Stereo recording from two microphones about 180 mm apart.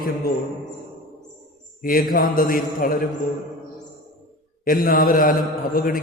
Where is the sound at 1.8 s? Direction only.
50° left (ahead or behind).